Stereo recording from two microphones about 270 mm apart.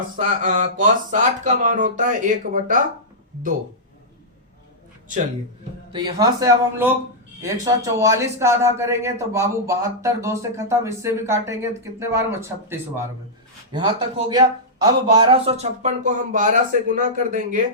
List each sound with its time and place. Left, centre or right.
0.2 s speech: right
5.9 s speech: centre